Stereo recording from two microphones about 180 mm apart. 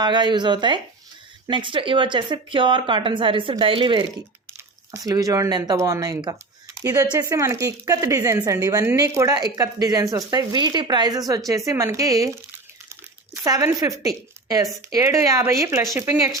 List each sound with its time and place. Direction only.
0.0 s a woman's voice: 25° right (ahead or behind)
12.9 s a sound: 15° right (ahead or behind)
14.4 s speech: 20° right (ahead or behind)